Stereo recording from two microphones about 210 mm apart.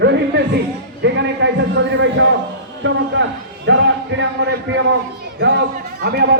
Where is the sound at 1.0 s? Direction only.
55° right (ahead or behind).